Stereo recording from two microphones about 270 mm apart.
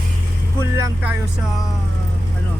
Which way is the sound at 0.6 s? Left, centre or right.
Centre.